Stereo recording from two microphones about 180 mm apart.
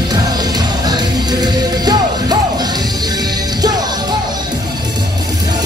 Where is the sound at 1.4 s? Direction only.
25° right (ahead or behind).